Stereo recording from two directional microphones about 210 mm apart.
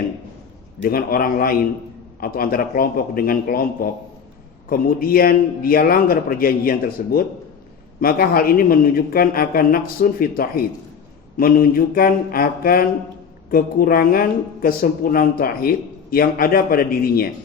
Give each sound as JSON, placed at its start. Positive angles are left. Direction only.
{"t": 0.8, "sound": "a woman's voice", "side_deg": 45}